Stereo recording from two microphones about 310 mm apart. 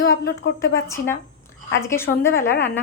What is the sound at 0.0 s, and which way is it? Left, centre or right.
Speech, left.